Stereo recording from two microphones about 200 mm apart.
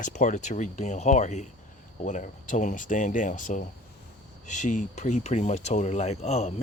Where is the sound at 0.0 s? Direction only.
40° left (ahead or behind).